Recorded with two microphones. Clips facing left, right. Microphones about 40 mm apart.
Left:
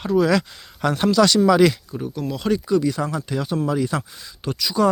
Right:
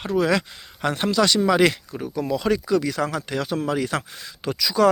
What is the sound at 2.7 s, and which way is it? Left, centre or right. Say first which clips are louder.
Speech: left 1 dB; right.